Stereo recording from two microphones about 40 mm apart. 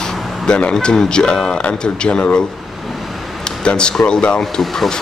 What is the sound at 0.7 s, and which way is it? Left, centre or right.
Speech, centre.